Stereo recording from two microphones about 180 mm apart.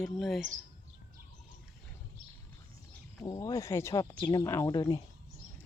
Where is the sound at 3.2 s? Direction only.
20° left (ahead or behind).